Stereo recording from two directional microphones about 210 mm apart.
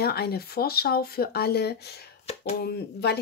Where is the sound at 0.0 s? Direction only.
50° left (ahead or behind).